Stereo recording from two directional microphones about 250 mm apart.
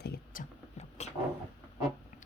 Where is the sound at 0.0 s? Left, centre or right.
Left.